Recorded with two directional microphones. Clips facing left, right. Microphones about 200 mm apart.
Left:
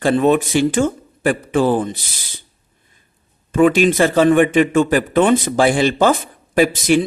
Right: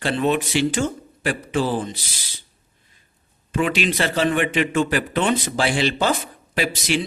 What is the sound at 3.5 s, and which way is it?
A man's voice, 50° left (ahead or behind).